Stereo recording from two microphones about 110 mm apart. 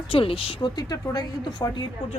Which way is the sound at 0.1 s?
55° left (ahead or behind).